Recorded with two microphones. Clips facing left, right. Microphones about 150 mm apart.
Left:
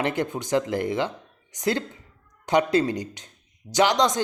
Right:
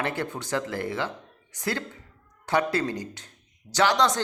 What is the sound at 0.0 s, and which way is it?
A woman's voice, 15° left (ahead or behind).